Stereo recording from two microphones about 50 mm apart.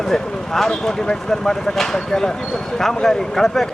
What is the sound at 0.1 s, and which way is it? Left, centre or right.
Speech, centre.